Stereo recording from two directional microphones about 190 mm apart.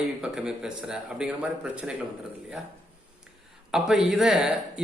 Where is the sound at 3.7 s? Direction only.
Centre (ahead or behind).